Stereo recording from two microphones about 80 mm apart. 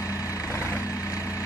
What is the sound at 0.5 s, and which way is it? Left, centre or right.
Vehicle, left.